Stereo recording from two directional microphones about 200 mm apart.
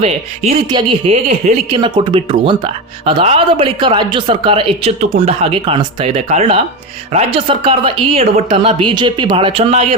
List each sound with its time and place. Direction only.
0.0 s speech: 30° right (ahead or behind)